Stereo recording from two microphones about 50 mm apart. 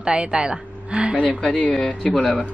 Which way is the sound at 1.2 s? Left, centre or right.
Centre.